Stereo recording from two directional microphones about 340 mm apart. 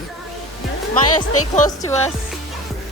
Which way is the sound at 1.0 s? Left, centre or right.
Left.